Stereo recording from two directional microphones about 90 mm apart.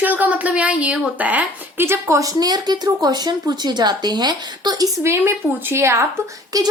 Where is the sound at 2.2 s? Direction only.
45° right (ahead or behind).